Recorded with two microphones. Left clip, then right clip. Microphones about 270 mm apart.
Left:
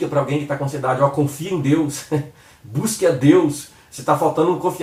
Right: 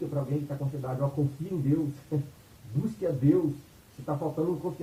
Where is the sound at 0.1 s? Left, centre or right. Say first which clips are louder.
Left 14 dB; centre.